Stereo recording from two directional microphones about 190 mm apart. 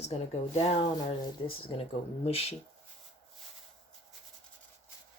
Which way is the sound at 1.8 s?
30° left (ahead or behind).